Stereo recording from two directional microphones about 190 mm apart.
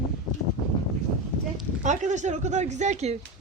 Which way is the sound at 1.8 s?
40° right (ahead or behind).